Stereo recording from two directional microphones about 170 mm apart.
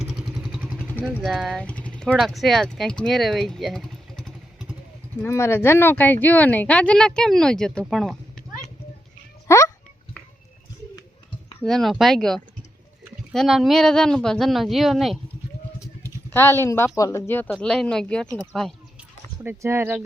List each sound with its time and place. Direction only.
0.0 s vehicle: centre (ahead or behind)
1.0 s speech: centre (ahead or behind)
5.2 s speech: 15° left (ahead or behind)
9.5 s a sound: 15° left (ahead or behind)
11.6 s a woman's voice: centre (ahead or behind)
16.3 s a woman's voice: 15° left (ahead or behind); by 20.0 s 15° right (ahead or behind)